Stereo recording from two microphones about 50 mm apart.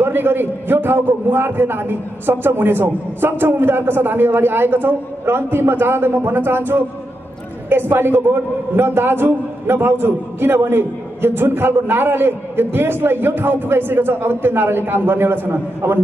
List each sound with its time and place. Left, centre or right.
0.0 s a man's voice: right